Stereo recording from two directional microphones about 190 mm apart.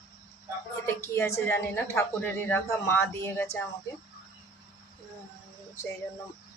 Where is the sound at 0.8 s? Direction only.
15° left (ahead or behind).